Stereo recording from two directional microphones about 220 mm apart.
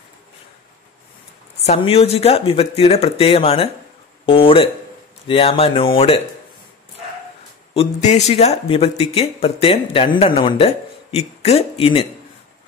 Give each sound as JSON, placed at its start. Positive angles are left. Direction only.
{"t": 1.7, "sound": "speech", "side_deg": 25}
{"t": 7.7, "sound": "speech", "side_deg": 30}